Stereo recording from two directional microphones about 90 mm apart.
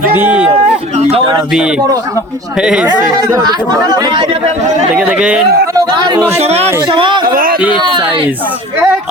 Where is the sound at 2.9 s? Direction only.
45° right (ahead or behind); by 4.4 s 85° right.